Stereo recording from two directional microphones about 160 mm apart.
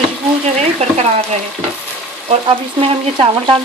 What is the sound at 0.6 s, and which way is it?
Frying, 40° right (ahead or behind).